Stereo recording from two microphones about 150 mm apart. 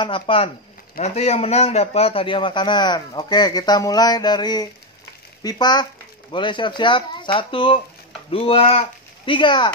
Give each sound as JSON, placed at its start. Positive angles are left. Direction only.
{"t": 0.0, "sound": "speech", "side_deg": 35}
{"t": 1.0, "sound": "a man's voice", "side_deg": 45}